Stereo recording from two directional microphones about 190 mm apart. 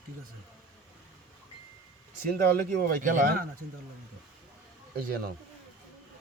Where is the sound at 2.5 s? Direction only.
50° right (ahead or behind).